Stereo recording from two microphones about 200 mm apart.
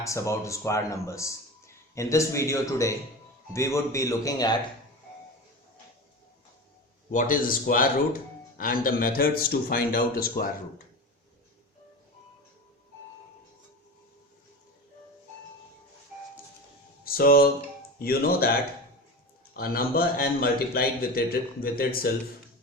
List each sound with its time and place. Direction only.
0.0 s speech: 15° left (ahead or behind)
7.1 s speech: 40° left (ahead or behind)
17.0 s speech: 50° left (ahead or behind)
19.5 s speech: 50° left (ahead or behind)